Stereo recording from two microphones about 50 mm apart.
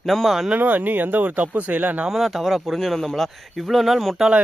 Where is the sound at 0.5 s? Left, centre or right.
Right.